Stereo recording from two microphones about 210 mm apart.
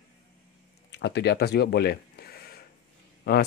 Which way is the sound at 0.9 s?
55° left (ahead or behind).